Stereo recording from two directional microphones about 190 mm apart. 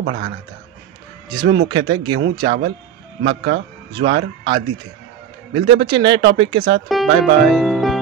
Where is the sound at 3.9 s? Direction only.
25° right (ahead or behind).